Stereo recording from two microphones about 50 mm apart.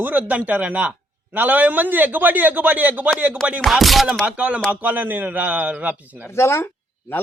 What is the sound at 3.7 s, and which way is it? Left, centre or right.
Speech, centre.